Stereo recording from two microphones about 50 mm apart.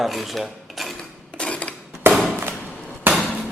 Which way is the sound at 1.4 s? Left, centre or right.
Left.